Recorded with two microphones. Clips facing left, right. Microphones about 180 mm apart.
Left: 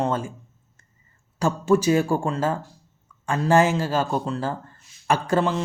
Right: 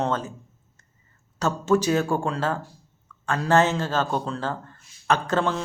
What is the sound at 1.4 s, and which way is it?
Speech, 10° left (ahead or behind).